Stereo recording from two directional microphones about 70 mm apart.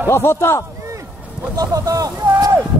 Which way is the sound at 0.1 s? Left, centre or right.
Left.